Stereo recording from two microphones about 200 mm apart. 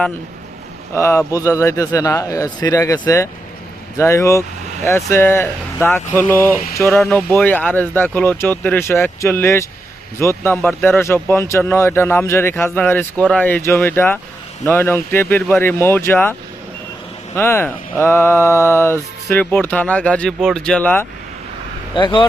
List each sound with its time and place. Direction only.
0.9 s speech: 15° left (ahead or behind)
17.3 s speech: 10° left (ahead or behind)
21.9 s speech: 25° left (ahead or behind)